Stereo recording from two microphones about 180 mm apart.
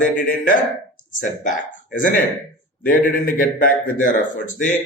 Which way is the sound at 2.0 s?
45° left (ahead or behind).